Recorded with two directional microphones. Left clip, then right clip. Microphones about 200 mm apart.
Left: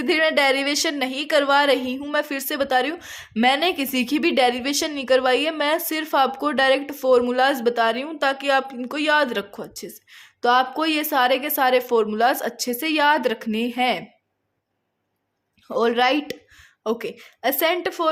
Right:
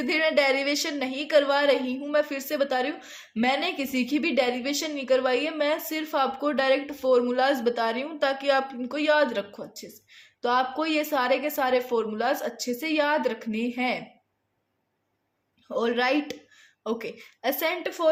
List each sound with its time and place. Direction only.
0.0 s a woman's voice: 40° left (ahead or behind)
15.6 s a woman's voice: 45° left (ahead or behind)